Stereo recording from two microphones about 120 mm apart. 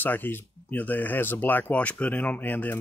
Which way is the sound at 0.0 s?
15° left (ahead or behind).